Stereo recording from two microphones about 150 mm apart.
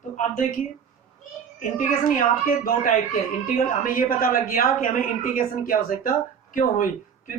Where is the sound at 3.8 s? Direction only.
70° left (ahead or behind).